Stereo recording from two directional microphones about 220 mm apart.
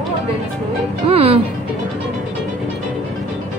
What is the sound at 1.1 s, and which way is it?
Speech, 25° right (ahead or behind).